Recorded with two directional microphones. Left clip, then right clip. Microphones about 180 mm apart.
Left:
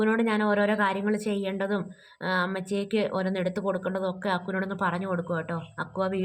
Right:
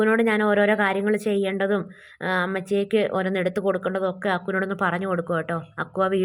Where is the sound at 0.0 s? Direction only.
25° right (ahead or behind).